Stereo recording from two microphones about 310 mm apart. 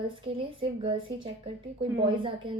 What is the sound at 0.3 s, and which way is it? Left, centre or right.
A woman's voice, centre.